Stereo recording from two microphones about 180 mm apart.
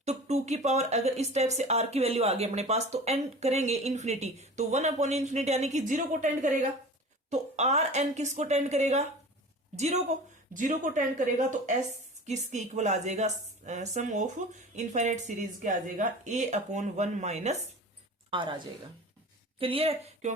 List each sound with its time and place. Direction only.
0.0 s a woman's voice: 35° right (ahead or behind)
18.3 s a woman's voice: 25° right (ahead or behind)